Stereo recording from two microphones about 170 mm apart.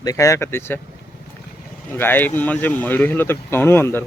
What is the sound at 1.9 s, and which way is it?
Speech, 10° left (ahead or behind).